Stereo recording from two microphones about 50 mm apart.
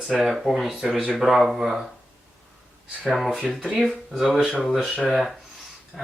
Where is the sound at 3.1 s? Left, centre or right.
Centre.